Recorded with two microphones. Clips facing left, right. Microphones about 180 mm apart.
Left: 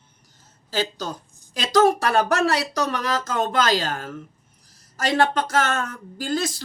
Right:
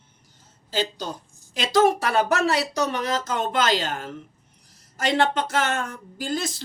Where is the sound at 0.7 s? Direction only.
20° right (ahead or behind).